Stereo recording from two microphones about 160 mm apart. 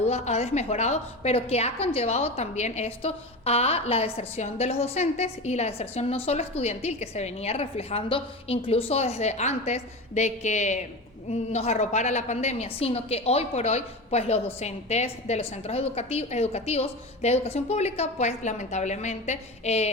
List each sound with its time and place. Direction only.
0.0 s a woman's voice: 40° left (ahead or behind)